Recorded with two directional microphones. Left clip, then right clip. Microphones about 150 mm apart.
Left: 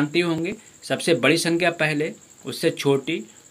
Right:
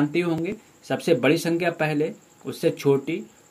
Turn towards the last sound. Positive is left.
turn(degrees=10)  # may be behind; listen again after turning